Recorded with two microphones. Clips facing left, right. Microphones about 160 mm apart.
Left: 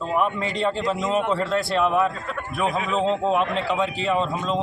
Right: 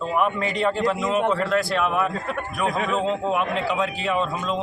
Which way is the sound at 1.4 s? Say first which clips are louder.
Even; 30° left (ahead or behind).